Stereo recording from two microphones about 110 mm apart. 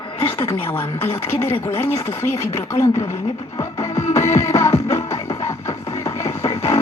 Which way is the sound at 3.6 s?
25° left (ahead or behind).